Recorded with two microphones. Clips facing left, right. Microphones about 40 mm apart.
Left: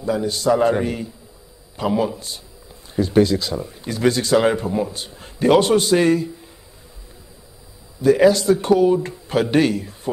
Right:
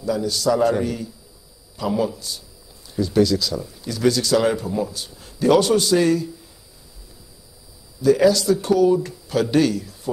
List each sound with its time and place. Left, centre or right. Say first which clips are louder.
0.0 s speech: left 1 dB; left
8.0 s speech: left 2 dB; left